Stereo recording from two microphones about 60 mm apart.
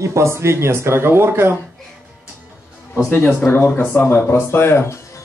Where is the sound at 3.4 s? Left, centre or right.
Left.